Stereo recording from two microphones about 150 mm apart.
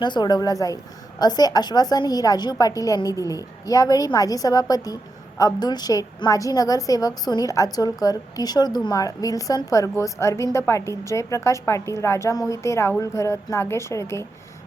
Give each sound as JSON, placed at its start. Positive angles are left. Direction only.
{"t": 0.0, "sound": "a woman's voice", "side_deg": 30}